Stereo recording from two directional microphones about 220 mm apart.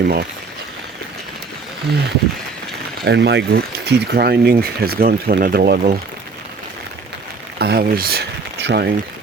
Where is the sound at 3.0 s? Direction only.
50° right (ahead or behind).